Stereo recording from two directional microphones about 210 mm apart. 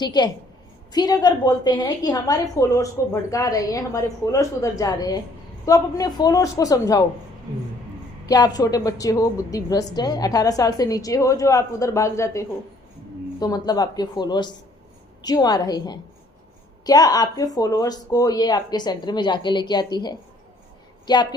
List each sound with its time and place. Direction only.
0.0 s a woman's voice: 20° left (ahead or behind)
8.3 s a woman's voice: 20° left (ahead or behind)